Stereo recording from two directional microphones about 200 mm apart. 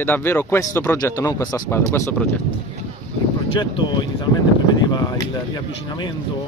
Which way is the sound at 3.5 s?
20° left (ahead or behind).